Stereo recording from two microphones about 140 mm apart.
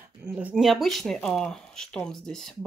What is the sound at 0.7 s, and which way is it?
Speech, centre (ahead or behind).